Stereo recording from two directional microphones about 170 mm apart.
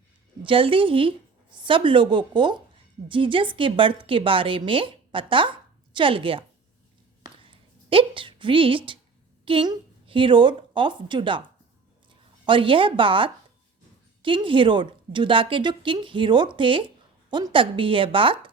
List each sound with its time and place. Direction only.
0.4 s a woman's voice: 30° right (ahead or behind)
7.4 s a sound: 30° right (ahead or behind)
9.4 s a woman's voice: 30° right (ahead or behind)
12.5 s a woman's voice: 30° right (ahead or behind)